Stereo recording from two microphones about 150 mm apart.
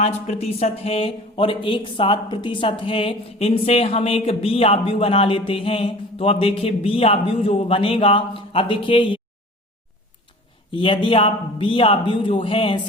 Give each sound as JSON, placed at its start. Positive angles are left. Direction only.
{"t": 0.0, "sound": "speech", "side_deg": 45}
{"t": 10.7, "sound": "speech", "side_deg": 35}